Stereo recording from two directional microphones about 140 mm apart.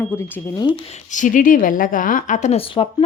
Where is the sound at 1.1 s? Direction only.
65° left (ahead or behind); by 2.8 s 45° left (ahead or behind).